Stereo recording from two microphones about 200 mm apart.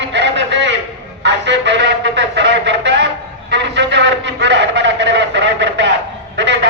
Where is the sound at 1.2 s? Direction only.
60° right (ahead or behind).